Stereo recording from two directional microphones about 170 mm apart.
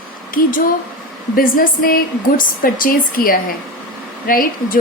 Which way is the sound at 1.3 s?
55° left (ahead or behind).